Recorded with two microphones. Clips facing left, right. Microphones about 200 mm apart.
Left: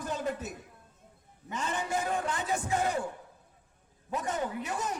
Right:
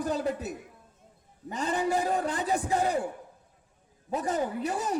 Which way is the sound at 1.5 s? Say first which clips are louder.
Right 5 dB; 35° right (ahead or behind).